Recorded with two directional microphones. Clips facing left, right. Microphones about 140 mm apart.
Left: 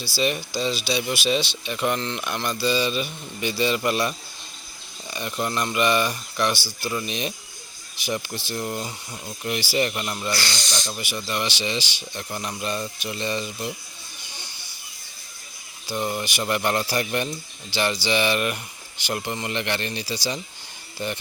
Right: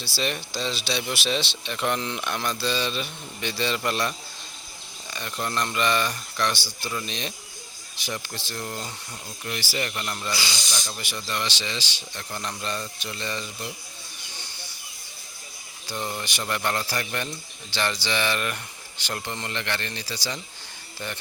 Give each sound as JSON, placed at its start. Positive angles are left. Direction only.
{"t": 0.0, "sound": "speech", "side_deg": 5}
{"t": 5.1, "sound": "speech", "side_deg": 10}
{"t": 10.3, "sound": "speech", "side_deg": -5}
{"t": 10.8, "sound": "speech", "side_deg": 10}
{"t": 15.9, "sound": "speech", "side_deg": 10}